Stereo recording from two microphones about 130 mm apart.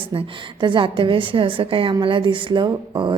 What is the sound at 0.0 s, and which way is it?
A woman's voice, 40° right (ahead or behind).